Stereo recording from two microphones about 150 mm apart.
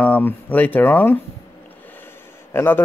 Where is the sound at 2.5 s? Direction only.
15° left (ahead or behind).